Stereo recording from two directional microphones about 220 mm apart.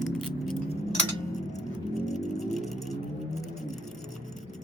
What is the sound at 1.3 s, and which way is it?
Music, 30° left (ahead or behind).